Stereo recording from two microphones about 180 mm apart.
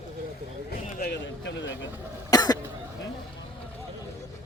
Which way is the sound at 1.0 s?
70° left (ahead or behind).